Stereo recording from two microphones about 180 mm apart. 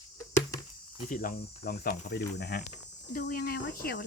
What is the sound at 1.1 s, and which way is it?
Speech, 50° left (ahead or behind).